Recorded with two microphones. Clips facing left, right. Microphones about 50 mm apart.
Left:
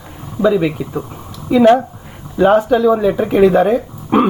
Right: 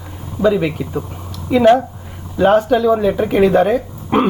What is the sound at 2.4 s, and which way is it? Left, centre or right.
Speech, centre.